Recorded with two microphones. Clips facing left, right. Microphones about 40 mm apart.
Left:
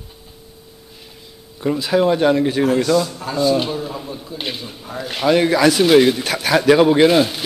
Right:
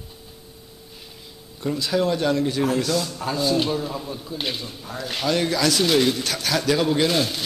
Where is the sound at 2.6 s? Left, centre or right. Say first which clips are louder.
Left 6 dB; centre.